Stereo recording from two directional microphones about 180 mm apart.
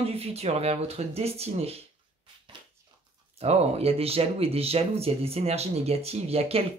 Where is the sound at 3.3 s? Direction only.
35° right (ahead or behind).